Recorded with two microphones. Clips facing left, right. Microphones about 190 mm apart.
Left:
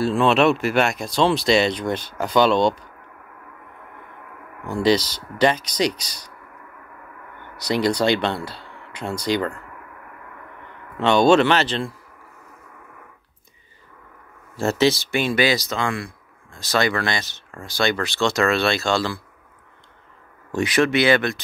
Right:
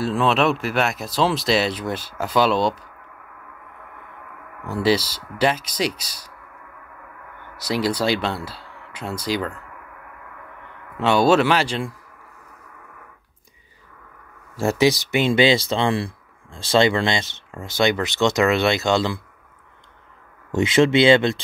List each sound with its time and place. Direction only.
0.0 s speech: centre (ahead or behind)
4.6 s speech: 5° right (ahead or behind)
7.5 s speech: 5° right (ahead or behind)
11.0 s speech: 5° right (ahead or behind)
14.6 s speech: 15° right (ahead or behind)
20.5 s speech: 25° right (ahead or behind)